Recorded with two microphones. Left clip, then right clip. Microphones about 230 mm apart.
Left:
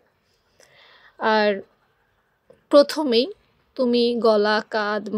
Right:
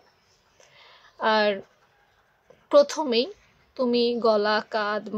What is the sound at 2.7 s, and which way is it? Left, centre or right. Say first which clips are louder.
A woman's voice: left 3 dB; left.